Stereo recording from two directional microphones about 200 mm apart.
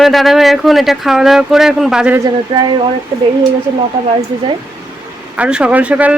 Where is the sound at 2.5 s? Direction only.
25° right (ahead or behind).